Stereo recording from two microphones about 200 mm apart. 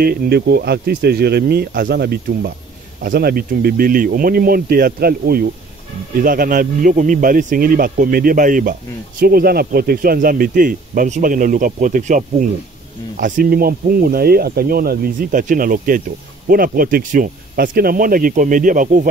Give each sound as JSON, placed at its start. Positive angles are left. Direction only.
{"t": 0.0, "sound": "speech", "side_deg": -50}